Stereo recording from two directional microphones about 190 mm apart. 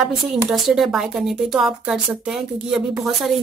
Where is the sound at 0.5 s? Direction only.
Centre (ahead or behind).